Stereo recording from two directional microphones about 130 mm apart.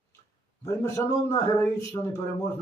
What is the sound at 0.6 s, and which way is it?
A man's voice, 25° left (ahead or behind).